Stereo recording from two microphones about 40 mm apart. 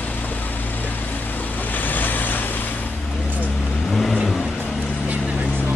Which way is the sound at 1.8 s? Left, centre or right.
Left.